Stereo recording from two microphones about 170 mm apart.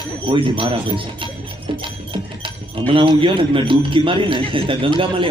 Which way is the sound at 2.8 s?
30° right (ahead or behind).